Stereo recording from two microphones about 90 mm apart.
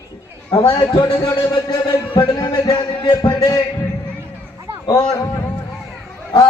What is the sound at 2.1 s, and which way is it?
Speech, 60° left (ahead or behind).